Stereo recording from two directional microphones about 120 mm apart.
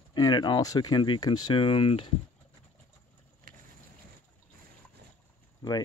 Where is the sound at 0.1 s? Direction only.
35° left (ahead or behind).